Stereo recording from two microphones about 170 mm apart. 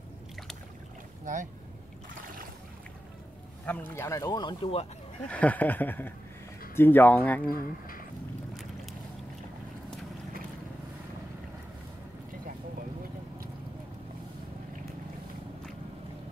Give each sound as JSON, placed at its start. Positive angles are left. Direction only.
{"t": 1.2, "sound": "speech", "side_deg": -50}
{"t": 3.6, "sound": "speech", "side_deg": 10}
{"t": 5.3, "sound": "speech", "side_deg": 10}